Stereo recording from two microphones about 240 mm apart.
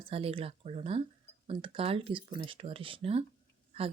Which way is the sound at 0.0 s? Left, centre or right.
Right.